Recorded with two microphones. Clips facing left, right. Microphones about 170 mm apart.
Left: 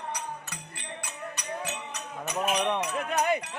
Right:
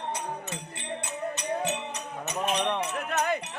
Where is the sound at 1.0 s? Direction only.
25° right (ahead or behind).